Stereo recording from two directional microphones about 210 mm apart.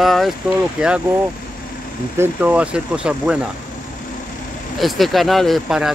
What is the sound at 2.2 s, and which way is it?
Speech, 5° right (ahead or behind).